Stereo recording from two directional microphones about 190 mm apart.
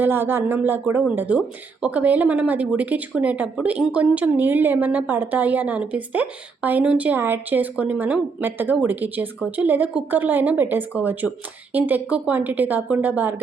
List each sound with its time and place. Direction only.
0.0 s a woman's voice: 10° right (ahead or behind)